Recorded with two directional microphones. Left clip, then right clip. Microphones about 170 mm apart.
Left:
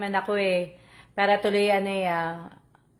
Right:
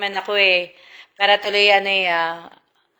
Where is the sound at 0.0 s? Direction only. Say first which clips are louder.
Right 7 dB; 20° right (ahead or behind).